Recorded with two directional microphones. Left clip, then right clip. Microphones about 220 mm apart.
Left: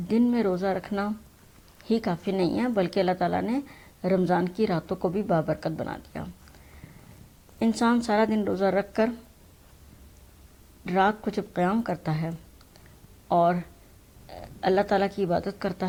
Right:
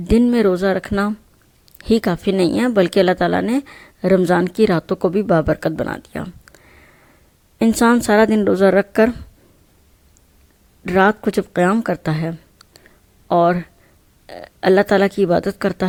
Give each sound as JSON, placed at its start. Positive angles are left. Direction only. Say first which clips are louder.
{"t": 0.1, "sound": "speech", "louder": "right 10 dB", "side_deg": -45}
{"t": 7.6, "sound": "speech", "louder": "right 10 dB", "side_deg": -45}
{"t": 10.8, "sound": "speech", "louder": "right 9 dB", "side_deg": -45}